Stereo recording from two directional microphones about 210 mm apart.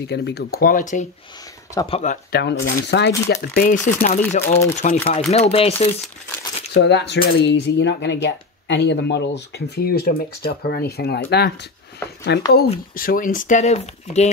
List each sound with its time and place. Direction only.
0.0 s speech: 50° left (ahead or behind); by 2.1 s 30° left (ahead or behind)
2.3 s speech: 55° left (ahead or behind)
3.5 s speech: 40° left (ahead or behind)
6.7 s speech: 50° left (ahead or behind)
12.9 s speech: 40° left (ahead or behind)